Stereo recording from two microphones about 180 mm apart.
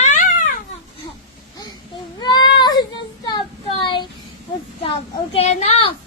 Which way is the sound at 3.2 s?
25° left (ahead or behind).